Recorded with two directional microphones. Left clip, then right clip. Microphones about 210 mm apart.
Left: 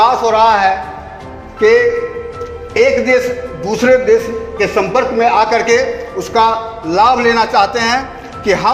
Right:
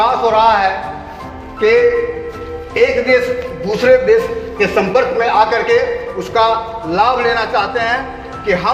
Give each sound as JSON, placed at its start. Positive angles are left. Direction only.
{"t": 0.0, "sound": "a man's voice", "side_deg": 45}